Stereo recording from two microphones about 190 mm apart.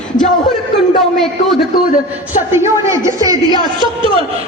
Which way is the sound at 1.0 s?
Centre (ahead or behind).